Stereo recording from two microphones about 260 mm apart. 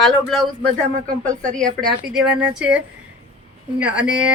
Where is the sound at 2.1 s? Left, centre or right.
Centre.